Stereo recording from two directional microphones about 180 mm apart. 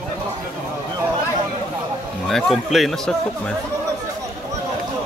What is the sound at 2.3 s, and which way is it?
Speech, centre (ahead or behind).